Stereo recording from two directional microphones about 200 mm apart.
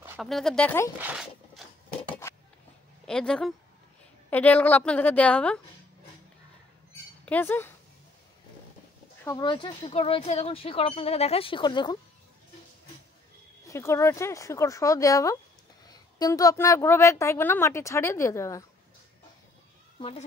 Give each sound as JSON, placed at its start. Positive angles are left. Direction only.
{"t": 0.2, "sound": "speech", "side_deg": 0}
{"t": 0.9, "sound": "zipper", "side_deg": -5}
{"t": 3.1, "sound": "a woman's voice", "side_deg": 5}
{"t": 7.2, "sound": "a woman's voice", "side_deg": 10}
{"t": 9.2, "sound": "speech", "side_deg": 20}
{"t": 13.7, "sound": "a woman's voice", "side_deg": 15}
{"t": 20.0, "sound": "speech", "side_deg": 25}